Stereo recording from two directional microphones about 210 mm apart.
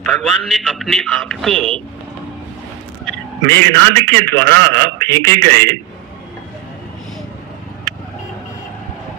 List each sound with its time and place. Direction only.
0.0 s a man's voice: centre (ahead or behind)
3.1 s a man's voice: 10° left (ahead or behind)